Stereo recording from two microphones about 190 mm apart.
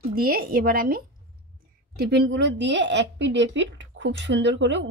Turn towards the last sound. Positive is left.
turn(degrees=-70)  # may be behind; listen again after turning